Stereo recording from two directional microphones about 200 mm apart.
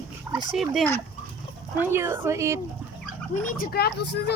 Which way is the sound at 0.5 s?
Centre (ahead or behind).